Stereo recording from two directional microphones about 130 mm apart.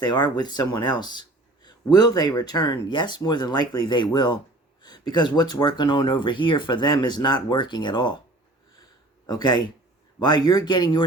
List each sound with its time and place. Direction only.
0.0 s speech: 35° left (ahead or behind)
9.2 s speech: 30° left (ahead or behind)